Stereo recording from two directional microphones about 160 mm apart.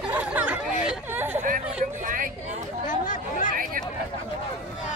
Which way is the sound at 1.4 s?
55° right (ahead or behind).